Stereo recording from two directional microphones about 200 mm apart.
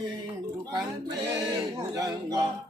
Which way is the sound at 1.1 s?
15° right (ahead or behind).